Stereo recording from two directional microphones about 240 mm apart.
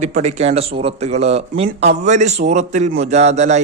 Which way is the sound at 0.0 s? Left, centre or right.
Right.